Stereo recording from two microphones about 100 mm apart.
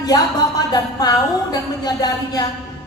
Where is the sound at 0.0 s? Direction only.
40° left (ahead or behind).